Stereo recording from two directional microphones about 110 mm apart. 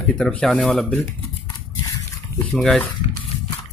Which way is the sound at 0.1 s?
10° left (ahead or behind).